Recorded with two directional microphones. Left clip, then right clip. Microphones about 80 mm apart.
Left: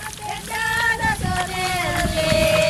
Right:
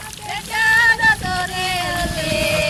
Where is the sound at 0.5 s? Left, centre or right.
Right.